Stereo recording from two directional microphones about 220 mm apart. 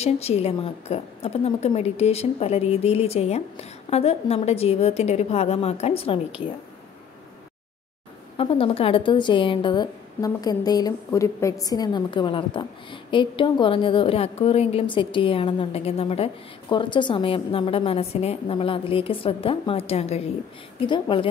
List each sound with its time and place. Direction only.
0.0 s a woman's voice: 30° left (ahead or behind)
8.4 s a woman's voice: 25° left (ahead or behind)